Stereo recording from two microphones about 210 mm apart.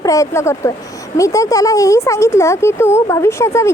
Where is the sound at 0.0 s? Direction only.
15° left (ahead or behind).